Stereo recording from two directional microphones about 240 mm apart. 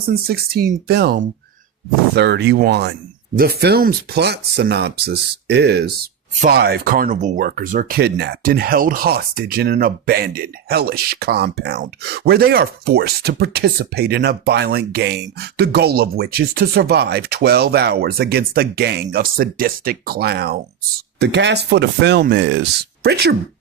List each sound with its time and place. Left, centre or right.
0.1 s speech: right